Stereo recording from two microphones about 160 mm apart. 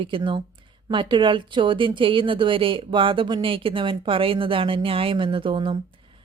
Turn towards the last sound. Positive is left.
turn(degrees=-30)  # may be behind; listen again after turning